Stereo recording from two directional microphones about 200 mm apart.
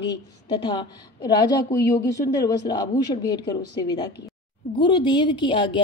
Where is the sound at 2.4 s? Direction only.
20° left (ahead or behind).